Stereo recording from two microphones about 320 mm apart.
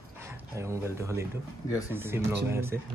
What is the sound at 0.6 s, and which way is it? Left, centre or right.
Speech, centre.